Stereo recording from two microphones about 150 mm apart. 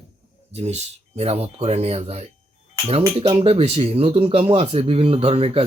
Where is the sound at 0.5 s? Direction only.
45° right (ahead or behind).